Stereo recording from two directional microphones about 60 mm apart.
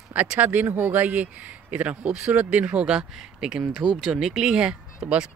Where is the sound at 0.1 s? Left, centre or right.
Right.